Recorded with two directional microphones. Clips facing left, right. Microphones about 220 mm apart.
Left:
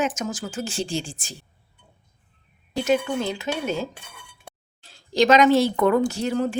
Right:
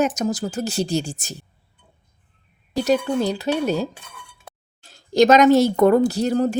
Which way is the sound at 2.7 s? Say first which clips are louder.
Right 3 dB; 35° right (ahead or behind).